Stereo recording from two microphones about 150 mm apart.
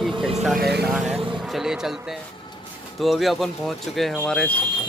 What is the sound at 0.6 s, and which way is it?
Vehicle, 90° right.